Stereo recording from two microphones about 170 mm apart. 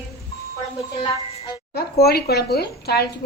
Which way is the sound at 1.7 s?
65° left (ahead or behind).